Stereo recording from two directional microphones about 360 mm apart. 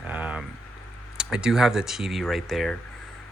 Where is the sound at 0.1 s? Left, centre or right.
Centre.